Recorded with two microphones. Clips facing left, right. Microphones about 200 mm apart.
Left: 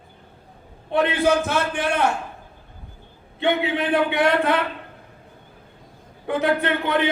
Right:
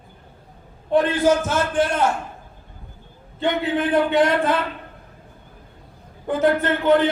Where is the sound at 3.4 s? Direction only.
65° left (ahead or behind).